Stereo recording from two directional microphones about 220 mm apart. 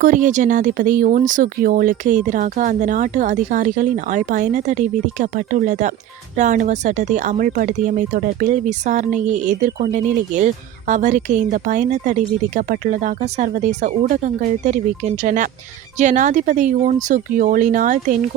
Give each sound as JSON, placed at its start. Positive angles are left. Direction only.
{"t": 0.0, "sound": "speech", "side_deg": -35}